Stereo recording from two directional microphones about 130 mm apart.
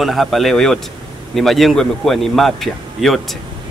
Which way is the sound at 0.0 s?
Centre (ahead or behind).